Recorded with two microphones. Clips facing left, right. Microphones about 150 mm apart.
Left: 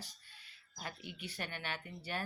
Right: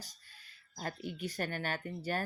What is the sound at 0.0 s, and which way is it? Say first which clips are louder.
Speech: even; 40° right (ahead or behind).